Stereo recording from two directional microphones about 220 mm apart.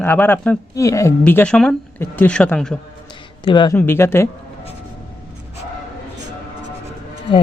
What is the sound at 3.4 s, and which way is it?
Speech, 20° left (ahead or behind).